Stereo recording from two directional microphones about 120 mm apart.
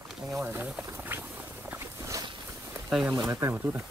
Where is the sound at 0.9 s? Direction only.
15° right (ahead or behind).